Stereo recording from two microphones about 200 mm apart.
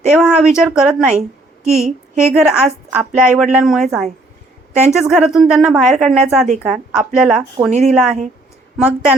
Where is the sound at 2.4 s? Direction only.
5° right (ahead or behind).